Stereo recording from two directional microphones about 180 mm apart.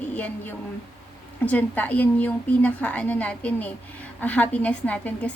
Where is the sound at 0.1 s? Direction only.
10° left (ahead or behind).